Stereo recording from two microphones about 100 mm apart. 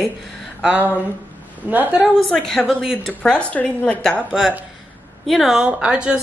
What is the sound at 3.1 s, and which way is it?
A woman's voice, 10° left (ahead or behind).